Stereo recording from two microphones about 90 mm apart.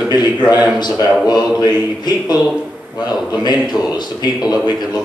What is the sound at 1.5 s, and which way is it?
A man's voice, 45° left (ahead or behind).